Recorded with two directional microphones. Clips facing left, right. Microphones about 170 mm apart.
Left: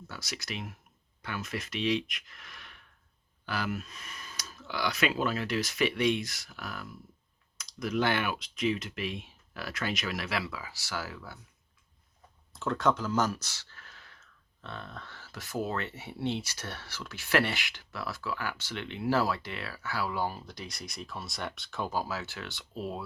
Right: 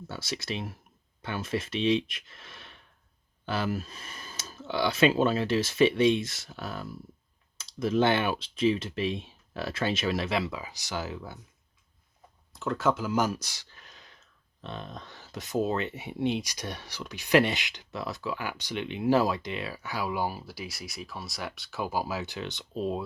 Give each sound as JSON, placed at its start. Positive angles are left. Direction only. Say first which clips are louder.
{"t": 0.1, "sound": "speech", "louder": "right 6 dB", "side_deg": -25}
{"t": 12.5, "sound": "speech", "louder": "right 1 dB", "side_deg": 0}